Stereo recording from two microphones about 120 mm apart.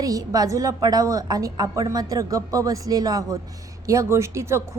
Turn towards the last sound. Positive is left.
turn(degrees=-25)  # may be behind; listen again after turning